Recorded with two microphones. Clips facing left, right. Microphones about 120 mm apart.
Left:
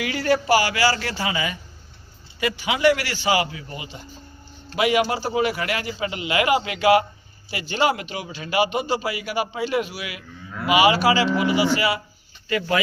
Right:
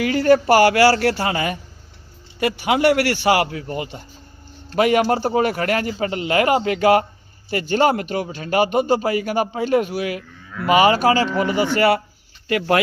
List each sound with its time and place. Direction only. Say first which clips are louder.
0.0 s a man's voice: right 7 dB; 45° right (ahead or behind)
11.3 s speech: right 1 dB; 10° left (ahead or behind)
11.5 s a man's voice: right 4 dB; 55° right (ahead or behind)
12.5 s a man's voice: right 4 dB; 65° right (ahead or behind)